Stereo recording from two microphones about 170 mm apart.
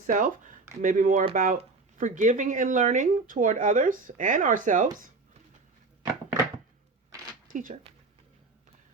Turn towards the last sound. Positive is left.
turn(degrees=-50)  # may be behind; listen again after turning